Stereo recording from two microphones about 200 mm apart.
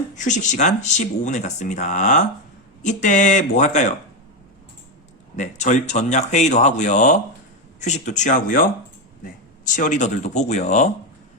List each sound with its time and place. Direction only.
0.2 s speech: 35° left (ahead or behind)
5.4 s speech: 35° left (ahead or behind)
9.7 s speech: 40° left (ahead or behind)